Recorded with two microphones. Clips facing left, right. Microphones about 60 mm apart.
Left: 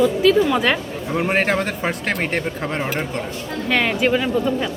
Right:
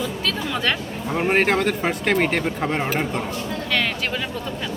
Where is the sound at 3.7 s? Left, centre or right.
Centre.